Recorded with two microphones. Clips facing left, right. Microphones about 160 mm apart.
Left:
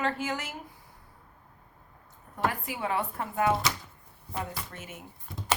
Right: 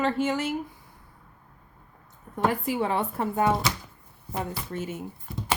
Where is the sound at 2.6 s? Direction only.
30° right (ahead or behind).